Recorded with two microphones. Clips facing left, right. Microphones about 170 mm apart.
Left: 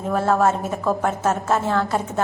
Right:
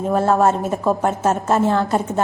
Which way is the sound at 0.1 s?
25° right (ahead or behind).